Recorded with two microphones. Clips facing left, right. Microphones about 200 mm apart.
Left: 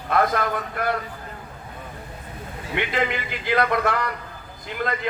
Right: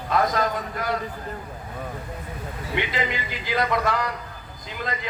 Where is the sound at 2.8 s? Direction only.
60° left (ahead or behind).